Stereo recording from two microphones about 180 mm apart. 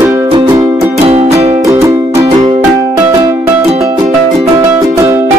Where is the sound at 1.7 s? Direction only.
15° right (ahead or behind).